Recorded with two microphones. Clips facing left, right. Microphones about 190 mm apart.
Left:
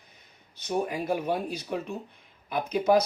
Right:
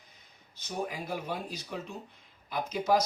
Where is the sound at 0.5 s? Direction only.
60° left (ahead or behind).